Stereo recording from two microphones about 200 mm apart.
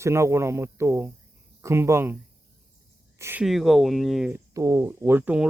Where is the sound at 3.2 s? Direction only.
10° right (ahead or behind).